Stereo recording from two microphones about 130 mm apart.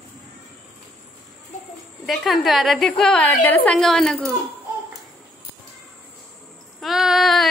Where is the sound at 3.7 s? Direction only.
5° left (ahead or behind).